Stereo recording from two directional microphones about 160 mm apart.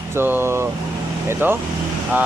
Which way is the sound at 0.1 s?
15° right (ahead or behind).